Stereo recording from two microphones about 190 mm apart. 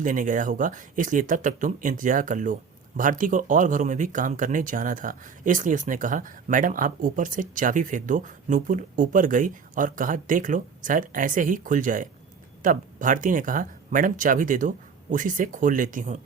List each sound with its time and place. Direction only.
0.0 s speech: 45° right (ahead or behind)